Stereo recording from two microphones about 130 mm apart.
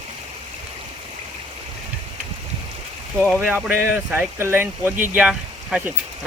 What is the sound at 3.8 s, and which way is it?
Speech, 15° right (ahead or behind).